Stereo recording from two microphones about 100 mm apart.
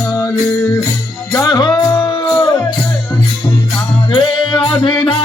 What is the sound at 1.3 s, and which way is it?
Music, 45° left (ahead or behind).